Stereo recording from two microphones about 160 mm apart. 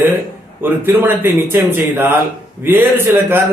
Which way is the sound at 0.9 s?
15° right (ahead or behind).